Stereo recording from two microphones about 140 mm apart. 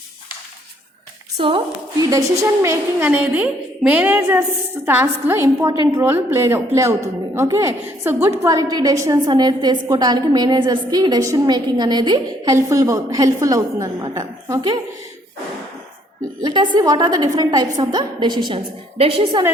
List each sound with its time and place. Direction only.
1.4 s a woman's voice: 40° right (ahead or behind)
2.0 s a woman's voice: 25° right (ahead or behind)
12.5 s a woman's voice: 20° right (ahead or behind)
16.4 s a woman's voice: 35° right (ahead or behind)